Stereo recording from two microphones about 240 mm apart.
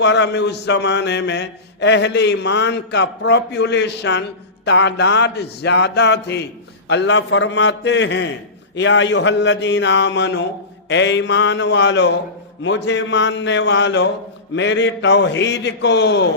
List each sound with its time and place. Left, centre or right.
0.0 s mantra: left